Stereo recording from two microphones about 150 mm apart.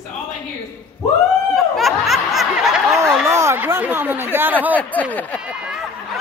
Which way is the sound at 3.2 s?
20° right (ahead or behind).